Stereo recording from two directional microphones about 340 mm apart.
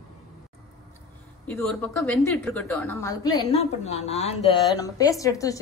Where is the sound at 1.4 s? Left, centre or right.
Centre.